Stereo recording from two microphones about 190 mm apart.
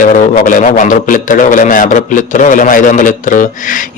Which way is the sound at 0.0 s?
45° left (ahead or behind).